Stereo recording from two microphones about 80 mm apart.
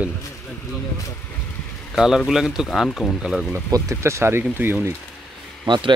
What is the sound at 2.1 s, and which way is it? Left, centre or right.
Speech, centre.